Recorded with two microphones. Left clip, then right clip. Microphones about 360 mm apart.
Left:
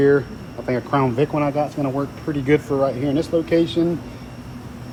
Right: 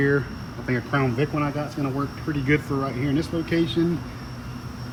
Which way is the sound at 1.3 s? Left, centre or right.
Left.